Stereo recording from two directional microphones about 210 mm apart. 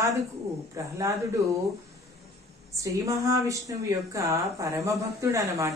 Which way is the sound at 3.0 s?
15° right (ahead or behind).